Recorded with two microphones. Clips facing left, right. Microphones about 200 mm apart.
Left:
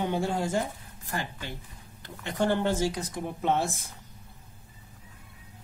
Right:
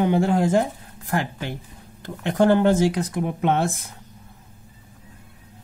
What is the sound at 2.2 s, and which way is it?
Speech, 90° right.